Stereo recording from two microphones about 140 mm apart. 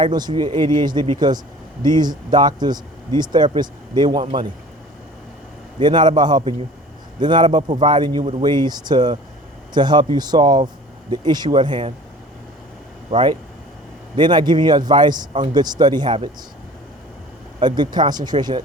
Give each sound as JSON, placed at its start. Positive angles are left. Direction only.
{"t": 0.0, "sound": "speech", "side_deg": -30}
{"t": 5.8, "sound": "speech", "side_deg": -30}
{"t": 13.1, "sound": "speech", "side_deg": -40}
{"t": 17.6, "sound": "speech", "side_deg": -30}